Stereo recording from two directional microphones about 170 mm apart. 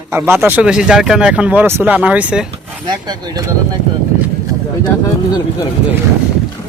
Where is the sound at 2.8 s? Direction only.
25° right (ahead or behind).